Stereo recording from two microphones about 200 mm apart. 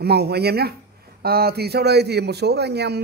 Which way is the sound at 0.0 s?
55° right (ahead or behind).